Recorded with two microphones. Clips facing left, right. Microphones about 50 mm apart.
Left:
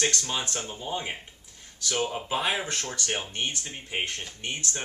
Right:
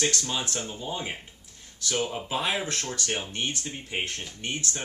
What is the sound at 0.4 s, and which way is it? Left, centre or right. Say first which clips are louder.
Speech: right 1 dB; centre.